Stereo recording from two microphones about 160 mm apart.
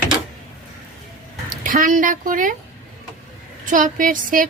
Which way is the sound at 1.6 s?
55° right (ahead or behind).